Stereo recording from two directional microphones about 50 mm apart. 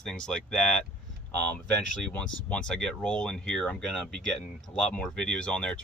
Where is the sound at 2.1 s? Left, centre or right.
Left.